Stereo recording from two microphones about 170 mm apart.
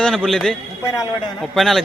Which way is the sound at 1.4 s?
Centre (ahead or behind).